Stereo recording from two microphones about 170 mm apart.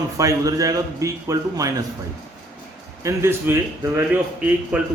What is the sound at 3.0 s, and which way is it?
A man's voice, 15° right (ahead or behind).